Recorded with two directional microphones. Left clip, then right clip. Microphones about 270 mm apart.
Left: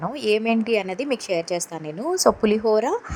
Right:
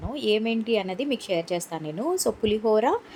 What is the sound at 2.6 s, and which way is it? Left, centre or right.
Speech, centre.